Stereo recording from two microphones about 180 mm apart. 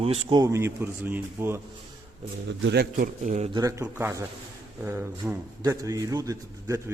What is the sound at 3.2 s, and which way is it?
Speech, 40° right (ahead or behind).